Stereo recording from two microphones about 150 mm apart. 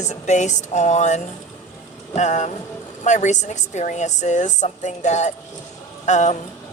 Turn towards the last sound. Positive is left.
turn(degrees=50)  # may be behind; listen again after turning